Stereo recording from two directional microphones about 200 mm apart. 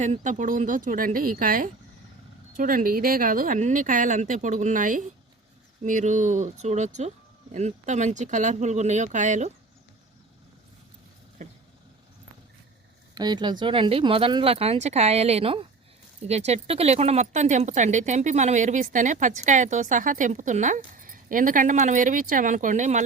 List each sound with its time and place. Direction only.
0.0 s speech: 35° right (ahead or behind)
13.1 s speech: 20° right (ahead or behind); by 23.0 s 40° right (ahead or behind)